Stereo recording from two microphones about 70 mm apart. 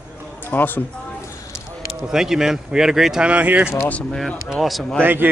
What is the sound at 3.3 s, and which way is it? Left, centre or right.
Speech, right.